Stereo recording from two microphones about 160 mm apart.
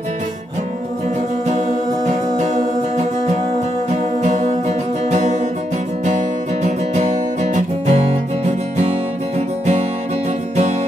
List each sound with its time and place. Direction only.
2.0 s music: 50° right (ahead or behind)
4.2 s music: 50° right (ahead or behind)